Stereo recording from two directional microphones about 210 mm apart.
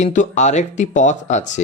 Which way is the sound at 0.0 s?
35° left (ahead or behind).